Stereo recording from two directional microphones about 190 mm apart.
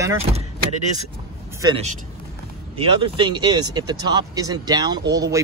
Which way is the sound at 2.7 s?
25° right (ahead or behind).